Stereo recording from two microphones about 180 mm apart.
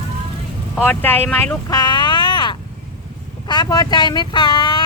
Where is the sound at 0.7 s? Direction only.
10° left (ahead or behind); by 4.8 s 25° left (ahead or behind).